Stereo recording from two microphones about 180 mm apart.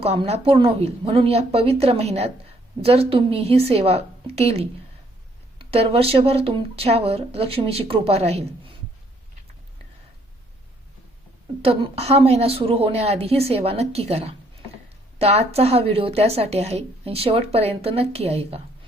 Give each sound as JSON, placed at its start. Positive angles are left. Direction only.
{"t": 0.0, "sound": "a woman's voice", "side_deg": -35}
{"t": 11.6, "sound": "a woman's voice", "side_deg": -30}